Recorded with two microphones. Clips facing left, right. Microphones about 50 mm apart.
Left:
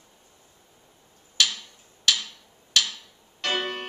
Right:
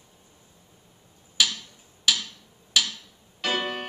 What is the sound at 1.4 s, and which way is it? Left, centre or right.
Tick-tock, centre.